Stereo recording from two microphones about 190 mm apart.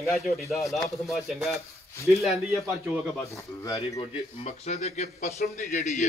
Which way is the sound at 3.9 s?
35° left (ahead or behind).